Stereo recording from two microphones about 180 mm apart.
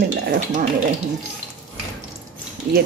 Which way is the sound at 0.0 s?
55° right (ahead or behind).